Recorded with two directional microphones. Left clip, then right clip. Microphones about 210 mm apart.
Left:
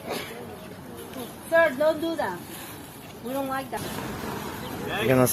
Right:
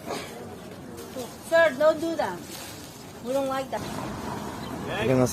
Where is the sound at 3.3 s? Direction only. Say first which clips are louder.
Right 3 dB; 20° right (ahead or behind).